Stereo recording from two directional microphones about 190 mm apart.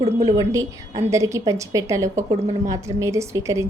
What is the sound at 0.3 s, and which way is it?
A woman's voice, 20° right (ahead or behind).